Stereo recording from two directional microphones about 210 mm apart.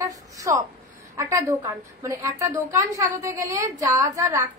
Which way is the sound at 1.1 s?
15° right (ahead or behind).